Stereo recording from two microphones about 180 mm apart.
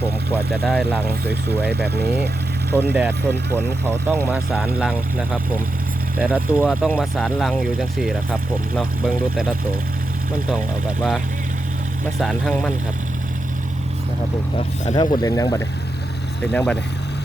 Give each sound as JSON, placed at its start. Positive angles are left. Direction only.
{"t": 0.0, "sound": "speech", "side_deg": -10}
{"t": 0.6, "sound": "speech", "side_deg": 0}
{"t": 1.0, "sound": "speech", "side_deg": -65}
{"t": 2.9, "sound": "speech", "side_deg": -10}
{"t": 12.2, "sound": "speech", "side_deg": 5}
{"t": 14.9, "sound": "speech", "side_deg": 25}
{"t": 16.4, "sound": "speech", "side_deg": 5}